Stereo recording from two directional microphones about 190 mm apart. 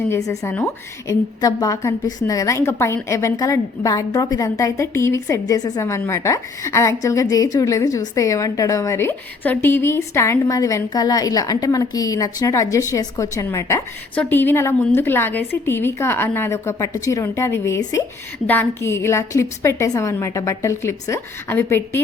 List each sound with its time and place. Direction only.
0.1 s a woman's voice: 15° left (ahead or behind)